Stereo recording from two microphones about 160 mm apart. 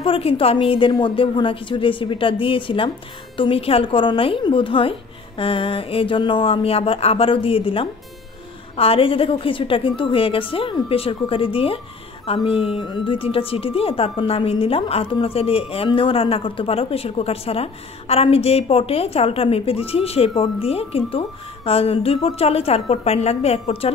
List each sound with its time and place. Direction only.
0.0 s a woman's voice: 35° left (ahead or behind)